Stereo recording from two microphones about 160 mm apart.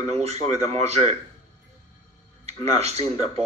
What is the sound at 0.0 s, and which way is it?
Speech, 40° right (ahead or behind).